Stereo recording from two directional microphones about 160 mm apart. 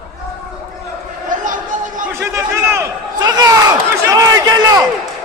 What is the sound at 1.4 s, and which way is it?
Chatter, 55° right (ahead or behind).